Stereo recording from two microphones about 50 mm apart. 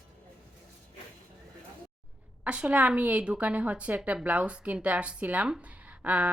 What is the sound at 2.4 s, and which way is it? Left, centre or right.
A woman's voice, right.